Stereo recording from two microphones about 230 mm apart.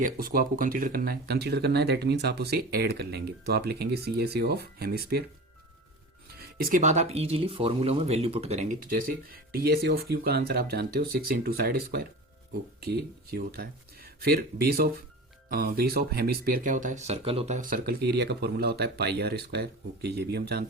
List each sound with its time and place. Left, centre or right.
0.0 s speech: right
6.6 s speech: right